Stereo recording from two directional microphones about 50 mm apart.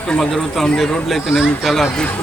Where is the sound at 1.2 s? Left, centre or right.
Centre.